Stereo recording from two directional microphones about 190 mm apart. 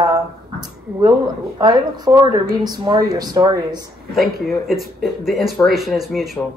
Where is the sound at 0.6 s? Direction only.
20° right (ahead or behind).